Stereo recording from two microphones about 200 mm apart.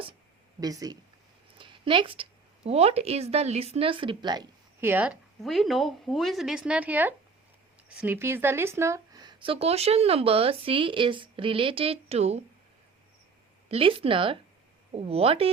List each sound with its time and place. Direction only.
0.6 s a woman's voice: 20° right (ahead or behind)
1.5 s a sound: 25° right (ahead or behind)
2.6 s a woman's voice: 30° right (ahead or behind)
13.7 s speech: 30° right (ahead or behind)